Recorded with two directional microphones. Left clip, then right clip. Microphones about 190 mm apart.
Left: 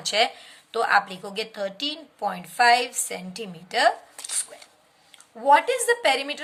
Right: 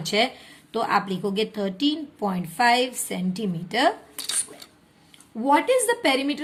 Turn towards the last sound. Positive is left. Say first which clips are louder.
# even
turn(degrees=20)  # may be behind; listen again after turning